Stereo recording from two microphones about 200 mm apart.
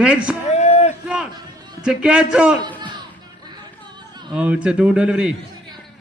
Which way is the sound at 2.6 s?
20° right (ahead or behind).